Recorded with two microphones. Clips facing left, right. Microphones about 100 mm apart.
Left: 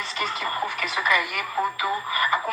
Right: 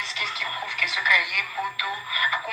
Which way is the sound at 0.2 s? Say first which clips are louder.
Left 7 dB; 40° left (ahead or behind).